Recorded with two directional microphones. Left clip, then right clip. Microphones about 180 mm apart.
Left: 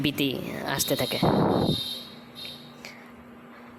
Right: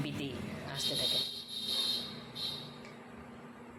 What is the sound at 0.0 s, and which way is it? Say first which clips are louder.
Speech: left 13 dB; 50° left (ahead or behind).